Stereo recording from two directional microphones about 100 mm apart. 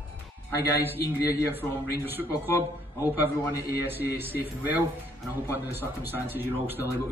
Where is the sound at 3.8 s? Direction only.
20° right (ahead or behind).